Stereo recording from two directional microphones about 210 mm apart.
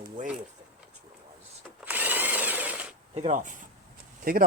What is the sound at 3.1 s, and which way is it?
Speech, 35° right (ahead or behind).